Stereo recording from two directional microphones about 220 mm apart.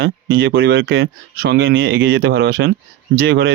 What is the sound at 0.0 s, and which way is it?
Speech, 45° right (ahead or behind).